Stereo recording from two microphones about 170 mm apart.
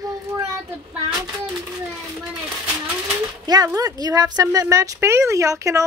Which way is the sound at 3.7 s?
20° right (ahead or behind).